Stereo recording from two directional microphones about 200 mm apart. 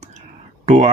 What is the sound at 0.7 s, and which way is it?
Speech, 35° right (ahead or behind).